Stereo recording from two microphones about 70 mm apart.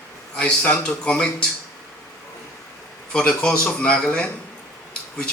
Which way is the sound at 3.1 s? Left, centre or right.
Centre.